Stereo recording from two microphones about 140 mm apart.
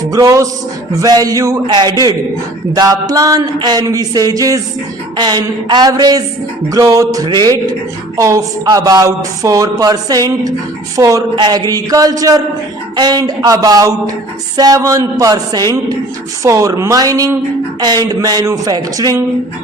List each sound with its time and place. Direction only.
0.1 s speech: 25° right (ahead or behind)